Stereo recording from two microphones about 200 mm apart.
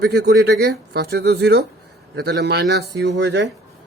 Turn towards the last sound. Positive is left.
turn(degrees=-60)  # may be behind; listen again after turning